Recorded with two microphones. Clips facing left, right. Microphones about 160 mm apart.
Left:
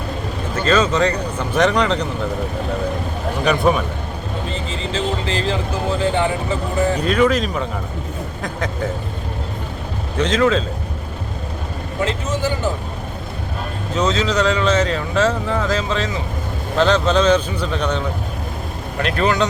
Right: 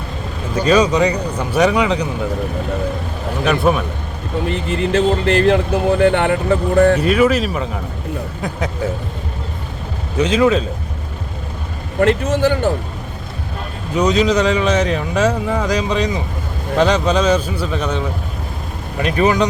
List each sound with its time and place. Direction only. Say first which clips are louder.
0.5 s speech: right 3 dB; 10° right (ahead or behind)
3.4 s speech: right 1 dB; centre (ahead or behind)
4.4 s speech: right 9 dB; 60° right (ahead or behind)
7.0 s speech: right 2 dB; 5° right (ahead or behind)
10.2 s speech: right 3 dB; 10° right (ahead or behind)
11.9 s speech: right 7 dB; 60° right (ahead or behind)
13.9 s speech: right 4 dB; 15° right (ahead or behind)